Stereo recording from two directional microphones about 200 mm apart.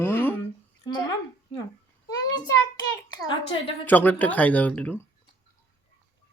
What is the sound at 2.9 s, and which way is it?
Speech, 25° left (ahead or behind).